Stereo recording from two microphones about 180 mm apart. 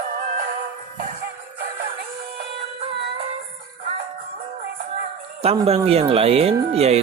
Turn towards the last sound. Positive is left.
turn(degrees=-35)  # may be behind; listen again after turning